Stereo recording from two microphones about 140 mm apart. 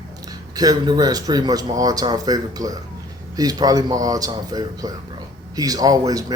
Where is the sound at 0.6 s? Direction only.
25° right (ahead or behind).